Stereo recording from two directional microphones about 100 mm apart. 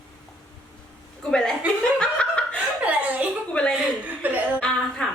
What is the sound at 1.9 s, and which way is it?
Laughter, 10° left (ahead or behind).